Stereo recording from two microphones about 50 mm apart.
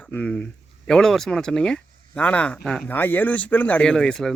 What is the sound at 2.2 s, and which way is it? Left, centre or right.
Speech, left.